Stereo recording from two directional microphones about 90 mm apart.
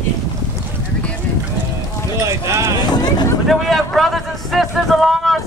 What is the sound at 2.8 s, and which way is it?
Vehicle, 50° left (ahead or behind).